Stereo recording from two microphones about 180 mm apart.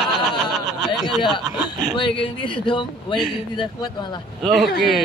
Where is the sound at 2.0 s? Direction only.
25° left (ahead or behind).